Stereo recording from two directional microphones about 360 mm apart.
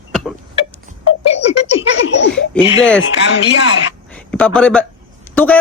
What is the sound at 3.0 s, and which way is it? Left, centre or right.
Speech, left.